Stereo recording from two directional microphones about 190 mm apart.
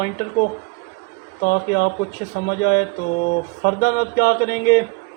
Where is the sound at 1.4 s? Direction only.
50° left (ahead or behind).